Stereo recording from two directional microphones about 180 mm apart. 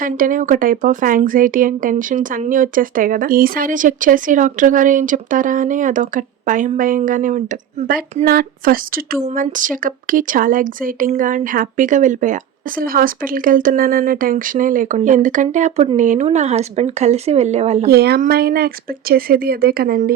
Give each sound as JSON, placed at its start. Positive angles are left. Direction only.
{"t": 0.0, "sound": "speech", "side_deg": -50}
{"t": 8.2, "sound": "speech", "side_deg": -55}
{"t": 17.8, "sound": "speech", "side_deg": -60}